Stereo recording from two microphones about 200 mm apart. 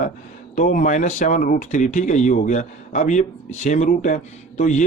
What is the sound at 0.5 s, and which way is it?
Speech, 40° left (ahead or behind).